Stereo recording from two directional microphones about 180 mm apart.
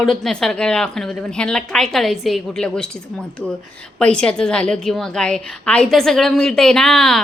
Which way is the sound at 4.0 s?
5° left (ahead or behind).